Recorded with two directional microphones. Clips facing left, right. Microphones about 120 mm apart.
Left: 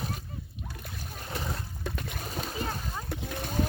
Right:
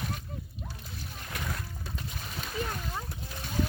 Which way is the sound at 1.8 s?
60° left (ahead or behind).